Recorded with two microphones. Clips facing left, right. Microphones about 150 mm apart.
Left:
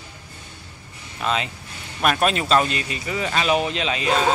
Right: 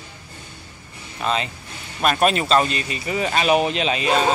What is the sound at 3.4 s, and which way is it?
Speech, 15° right (ahead or behind).